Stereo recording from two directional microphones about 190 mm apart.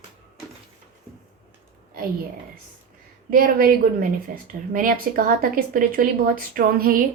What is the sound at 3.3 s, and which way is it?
A woman's voice, 50° right (ahead or behind).